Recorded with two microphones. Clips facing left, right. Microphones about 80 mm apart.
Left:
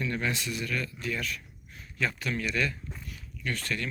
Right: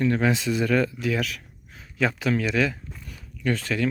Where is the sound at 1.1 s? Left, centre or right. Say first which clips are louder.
Right 7 dB; right.